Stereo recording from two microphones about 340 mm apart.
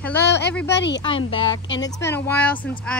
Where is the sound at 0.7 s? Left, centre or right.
Left.